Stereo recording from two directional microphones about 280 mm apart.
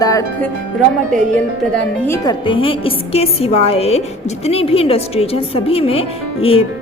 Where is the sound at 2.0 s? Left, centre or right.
Centre.